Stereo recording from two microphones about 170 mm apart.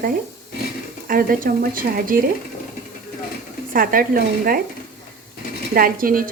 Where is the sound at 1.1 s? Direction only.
55° right (ahead or behind).